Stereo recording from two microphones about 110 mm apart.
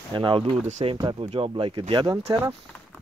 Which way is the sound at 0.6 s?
90° right.